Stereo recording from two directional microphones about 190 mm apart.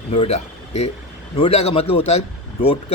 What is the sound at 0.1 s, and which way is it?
Speech, 35° left (ahead or behind).